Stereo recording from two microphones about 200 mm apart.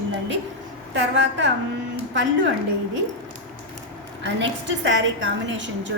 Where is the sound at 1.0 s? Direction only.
65° right (ahead or behind).